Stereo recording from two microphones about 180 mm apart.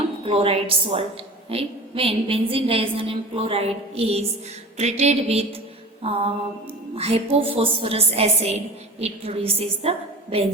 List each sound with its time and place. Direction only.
0.3 s a woman's voice: 35° right (ahead or behind)